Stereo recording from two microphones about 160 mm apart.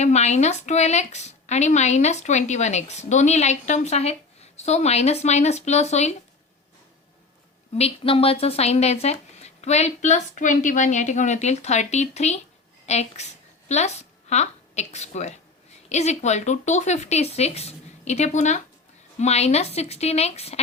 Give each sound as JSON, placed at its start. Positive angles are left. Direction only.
{"t": 0.0, "sound": "a woman's voice", "side_deg": 45}
{"t": 7.8, "sound": "a woman's voice", "side_deg": 35}